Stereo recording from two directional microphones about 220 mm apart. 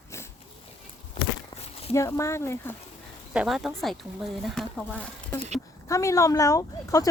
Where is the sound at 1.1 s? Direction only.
25° left (ahead or behind).